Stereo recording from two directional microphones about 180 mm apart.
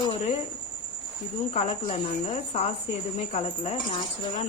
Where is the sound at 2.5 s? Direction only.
35° left (ahead or behind).